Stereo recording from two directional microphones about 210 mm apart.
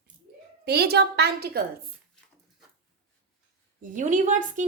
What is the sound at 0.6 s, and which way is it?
A woman's voice, 50° right (ahead or behind).